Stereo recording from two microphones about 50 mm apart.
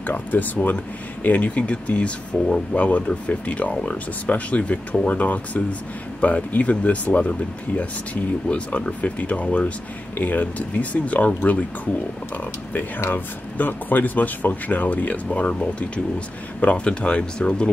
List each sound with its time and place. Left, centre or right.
0.0 s speech: left
13.1 s speech: left
15.4 s speech: centre